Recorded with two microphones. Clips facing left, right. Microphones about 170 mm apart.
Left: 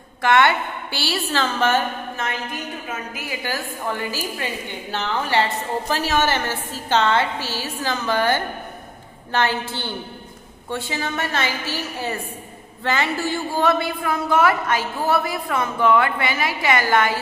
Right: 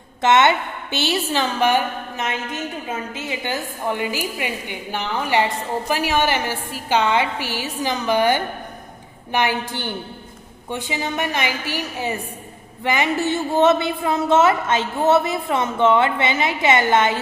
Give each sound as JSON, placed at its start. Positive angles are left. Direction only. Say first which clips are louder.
{"t": 0.2, "sound": "a woman's voice", "louder": "right 2 dB", "side_deg": -20}